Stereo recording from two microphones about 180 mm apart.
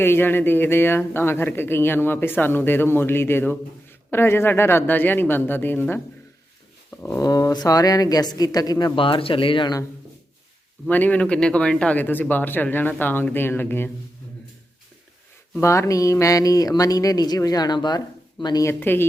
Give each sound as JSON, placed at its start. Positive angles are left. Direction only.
{"t": 0.0, "sound": "speech", "side_deg": 10}
{"t": 10.8, "sound": "speech", "side_deg": 10}
{"t": 15.5, "sound": "speech", "side_deg": 15}